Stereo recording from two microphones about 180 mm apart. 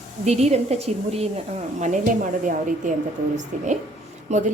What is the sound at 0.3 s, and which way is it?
A woman's voice, 35° right (ahead or behind).